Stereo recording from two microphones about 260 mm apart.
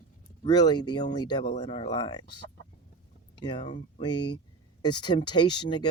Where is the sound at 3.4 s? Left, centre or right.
Centre.